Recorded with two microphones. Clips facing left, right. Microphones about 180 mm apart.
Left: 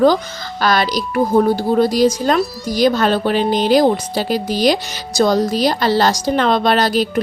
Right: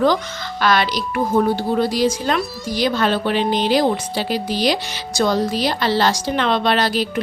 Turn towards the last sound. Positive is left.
turn(degrees=40)  # may be behind; listen again after turning